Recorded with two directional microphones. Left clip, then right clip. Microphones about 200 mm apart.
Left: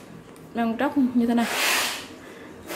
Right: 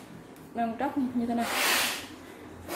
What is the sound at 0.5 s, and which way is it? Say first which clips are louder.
Speech: left 5 dB; 30° left (ahead or behind).